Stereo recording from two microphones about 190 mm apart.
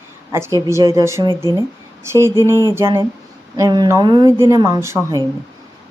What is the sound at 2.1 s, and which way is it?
A woman's voice, 15° right (ahead or behind).